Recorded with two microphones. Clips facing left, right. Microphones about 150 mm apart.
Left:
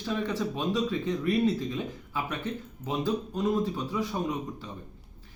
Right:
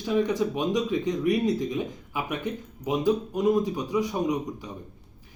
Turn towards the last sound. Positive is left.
turn(degrees=-15)  # may be behind; listen again after turning